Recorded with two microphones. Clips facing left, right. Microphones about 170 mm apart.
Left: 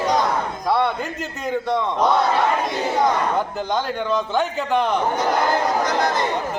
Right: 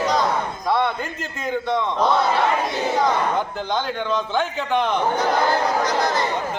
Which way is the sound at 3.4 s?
5° left (ahead or behind).